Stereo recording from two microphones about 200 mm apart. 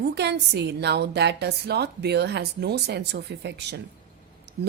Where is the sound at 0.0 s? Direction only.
55° right (ahead or behind).